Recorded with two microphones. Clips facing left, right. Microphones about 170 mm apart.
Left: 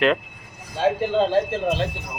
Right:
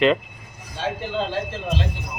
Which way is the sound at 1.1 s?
50° left (ahead or behind).